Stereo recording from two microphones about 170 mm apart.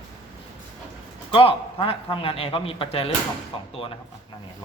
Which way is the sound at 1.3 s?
30° left (ahead or behind).